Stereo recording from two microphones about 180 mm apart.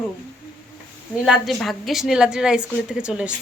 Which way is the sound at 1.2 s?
Centre (ahead or behind).